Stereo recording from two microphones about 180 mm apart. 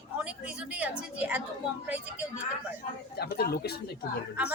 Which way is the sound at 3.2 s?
60° left (ahead or behind).